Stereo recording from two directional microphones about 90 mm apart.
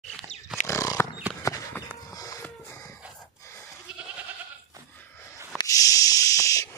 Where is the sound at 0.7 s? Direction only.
35° left (ahead or behind).